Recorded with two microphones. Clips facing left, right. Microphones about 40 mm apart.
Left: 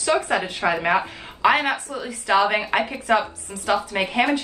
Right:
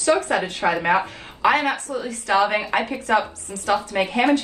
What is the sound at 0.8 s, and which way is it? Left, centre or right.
Speech, centre.